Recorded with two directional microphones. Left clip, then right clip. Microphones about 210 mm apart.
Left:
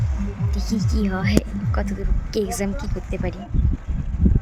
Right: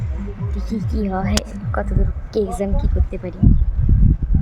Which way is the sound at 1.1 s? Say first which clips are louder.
Right 3 dB; 15° left (ahead or behind).